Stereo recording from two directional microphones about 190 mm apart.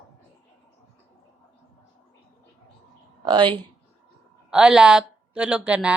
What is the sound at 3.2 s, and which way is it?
Speech, 25° right (ahead or behind).